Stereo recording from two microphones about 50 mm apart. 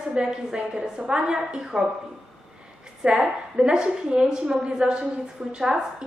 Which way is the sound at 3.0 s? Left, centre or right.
Centre.